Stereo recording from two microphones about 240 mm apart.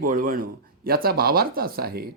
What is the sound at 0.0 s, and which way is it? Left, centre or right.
Speech, right.